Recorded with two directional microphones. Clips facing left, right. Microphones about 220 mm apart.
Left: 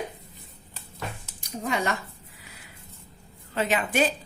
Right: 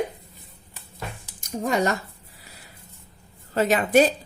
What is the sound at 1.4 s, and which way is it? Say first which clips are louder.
Speech: right 5 dB; 40° right (ahead or behind).